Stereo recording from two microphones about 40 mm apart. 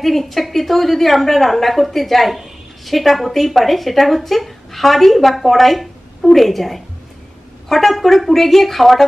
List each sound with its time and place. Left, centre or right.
0.0 s a woman's voice: centre